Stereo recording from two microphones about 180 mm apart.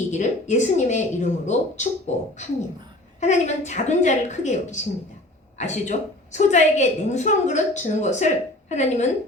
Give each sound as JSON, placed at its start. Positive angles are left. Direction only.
{"t": 0.1, "sound": "a woman's voice", "side_deg": 40}